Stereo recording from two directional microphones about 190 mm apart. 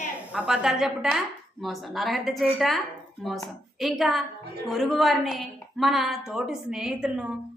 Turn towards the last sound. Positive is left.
turn(degrees=-5)  # may be behind; listen again after turning